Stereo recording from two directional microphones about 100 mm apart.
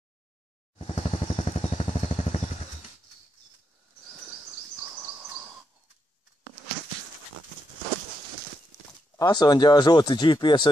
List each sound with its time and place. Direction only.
0.8 s vehicle: 85° left
9.2 s speech: 45° left (ahead or behind)